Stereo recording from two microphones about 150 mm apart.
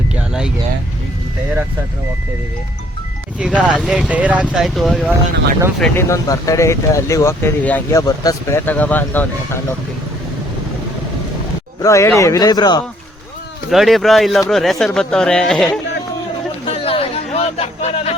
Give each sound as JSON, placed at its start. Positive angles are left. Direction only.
{"t": 3.3, "sound": "speech", "side_deg": -5}
{"t": 6.0, "sound": "speech", "side_deg": 20}
{"t": 8.0, "sound": "speech", "side_deg": 25}
{"t": 11.8, "sound": "speech", "side_deg": 20}
{"t": 13.7, "sound": "speech", "side_deg": 0}
{"t": 16.6, "sound": "a sound", "side_deg": 40}